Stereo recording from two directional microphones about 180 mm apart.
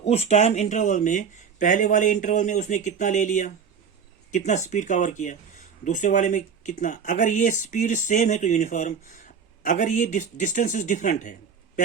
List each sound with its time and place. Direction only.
0.0 s speech: 35° left (ahead or behind)